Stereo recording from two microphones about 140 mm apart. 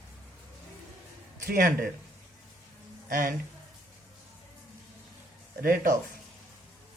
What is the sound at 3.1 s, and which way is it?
Speech, 90° right.